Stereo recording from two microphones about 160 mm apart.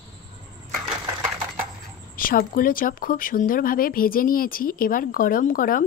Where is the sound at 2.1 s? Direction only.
60° left (ahead or behind).